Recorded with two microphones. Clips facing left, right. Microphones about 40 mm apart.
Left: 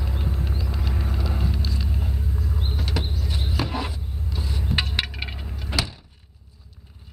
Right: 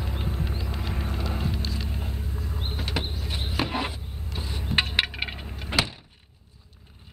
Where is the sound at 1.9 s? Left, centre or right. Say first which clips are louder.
Left 4 dB; centre.